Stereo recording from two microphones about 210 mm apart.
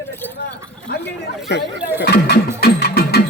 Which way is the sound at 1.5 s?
50° left (ahead or behind).